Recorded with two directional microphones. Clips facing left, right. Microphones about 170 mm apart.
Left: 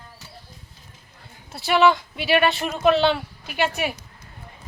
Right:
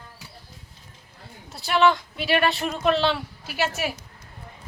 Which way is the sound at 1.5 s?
Centre (ahead or behind).